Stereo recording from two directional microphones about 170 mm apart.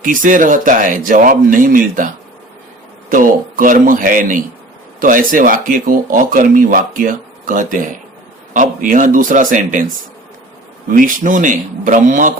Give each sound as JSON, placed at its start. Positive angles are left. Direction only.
{"t": 0.0, "sound": "speech", "side_deg": -50}
{"t": 3.1, "sound": "speech", "side_deg": -55}
{"t": 10.9, "sound": "speech", "side_deg": -50}